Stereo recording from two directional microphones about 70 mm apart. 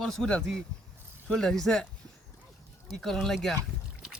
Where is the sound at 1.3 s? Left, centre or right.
Centre.